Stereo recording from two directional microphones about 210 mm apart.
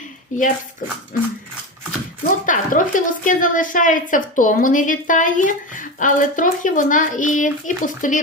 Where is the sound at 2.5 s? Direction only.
40° left (ahead or behind).